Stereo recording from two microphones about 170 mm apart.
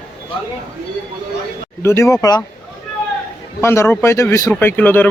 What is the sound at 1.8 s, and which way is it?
Speech, 15° left (ahead or behind).